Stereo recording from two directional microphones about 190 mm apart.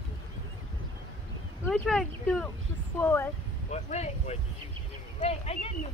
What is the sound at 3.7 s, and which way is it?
Speech, 35° left (ahead or behind).